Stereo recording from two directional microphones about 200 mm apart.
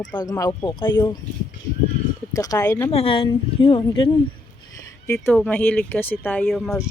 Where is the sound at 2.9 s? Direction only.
25° left (ahead or behind).